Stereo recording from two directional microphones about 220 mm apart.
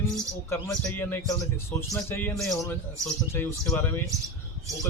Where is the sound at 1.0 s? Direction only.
10° left (ahead or behind).